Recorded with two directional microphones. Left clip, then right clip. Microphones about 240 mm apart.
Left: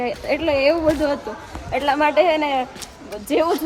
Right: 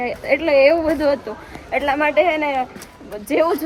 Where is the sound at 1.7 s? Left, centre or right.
Centre.